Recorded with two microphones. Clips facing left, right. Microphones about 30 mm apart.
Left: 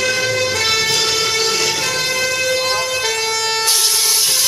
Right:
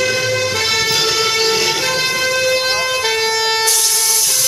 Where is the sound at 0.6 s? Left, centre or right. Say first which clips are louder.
Right 1 dB; centre.